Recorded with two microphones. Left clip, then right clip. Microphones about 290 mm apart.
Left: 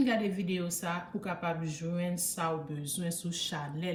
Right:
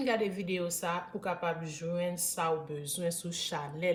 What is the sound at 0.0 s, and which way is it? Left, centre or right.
A woman's voice, centre.